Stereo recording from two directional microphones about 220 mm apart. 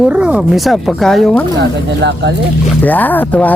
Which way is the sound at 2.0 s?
55° right (ahead or behind).